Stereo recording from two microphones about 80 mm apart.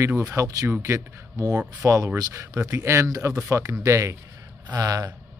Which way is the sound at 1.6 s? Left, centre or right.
Centre.